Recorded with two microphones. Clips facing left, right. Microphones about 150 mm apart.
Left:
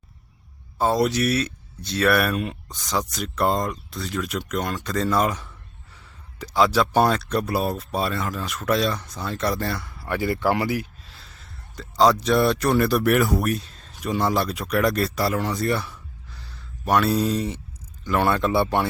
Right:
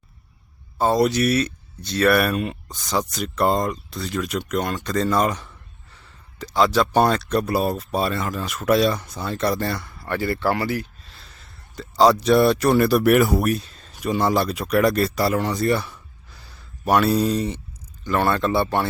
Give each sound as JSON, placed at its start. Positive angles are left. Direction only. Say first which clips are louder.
{"t": 0.8, "sound": "speech", "louder": "right 2 dB", "side_deg": 0}
{"t": 11.0, "sound": "a sound", "louder": "even", "side_deg": 0}
{"t": 12.2, "sound": "speech", "louder": "right 4 dB", "side_deg": -5}
{"t": 16.4, "sound": "speech", "louder": "right 3 dB", "side_deg": -10}
{"t": 18.6, "sound": "speech", "louder": "even", "side_deg": 15}